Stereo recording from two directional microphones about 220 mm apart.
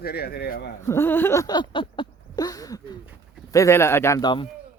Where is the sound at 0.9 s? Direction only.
10° left (ahead or behind).